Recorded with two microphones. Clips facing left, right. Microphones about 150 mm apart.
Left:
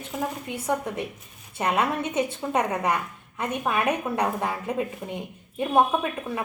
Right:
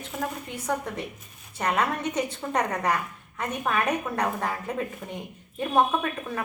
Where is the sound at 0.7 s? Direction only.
20° left (ahead or behind).